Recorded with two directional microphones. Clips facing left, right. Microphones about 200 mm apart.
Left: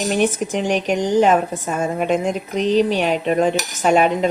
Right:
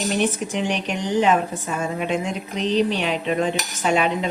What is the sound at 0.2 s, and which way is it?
A woman's voice, 45° left (ahead or behind).